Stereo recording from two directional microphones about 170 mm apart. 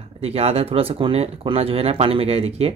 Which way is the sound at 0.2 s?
35° right (ahead or behind).